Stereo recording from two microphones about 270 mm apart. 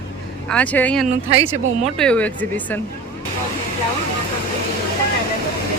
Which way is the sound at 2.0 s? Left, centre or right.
Centre.